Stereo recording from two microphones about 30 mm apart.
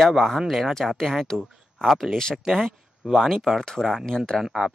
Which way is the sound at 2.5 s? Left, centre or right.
Centre.